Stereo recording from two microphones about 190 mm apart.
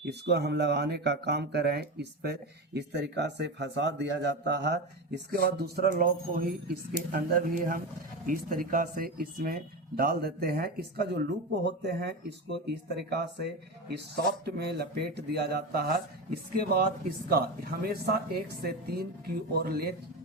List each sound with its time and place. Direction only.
0.0 s speech: 60° right (ahead or behind)